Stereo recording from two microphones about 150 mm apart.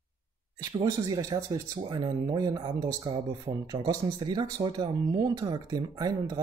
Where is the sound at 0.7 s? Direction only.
25° right (ahead or behind).